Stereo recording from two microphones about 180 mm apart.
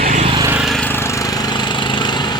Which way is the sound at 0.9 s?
15° left (ahead or behind).